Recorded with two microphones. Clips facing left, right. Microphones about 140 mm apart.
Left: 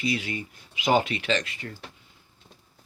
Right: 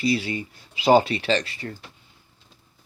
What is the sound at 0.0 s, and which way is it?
Speech, 35° right (ahead or behind).